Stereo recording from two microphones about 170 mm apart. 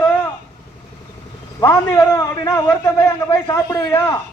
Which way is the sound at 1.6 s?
20° left (ahead or behind).